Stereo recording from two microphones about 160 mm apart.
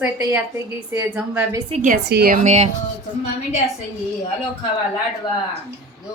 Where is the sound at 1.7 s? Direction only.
50° right (ahead or behind).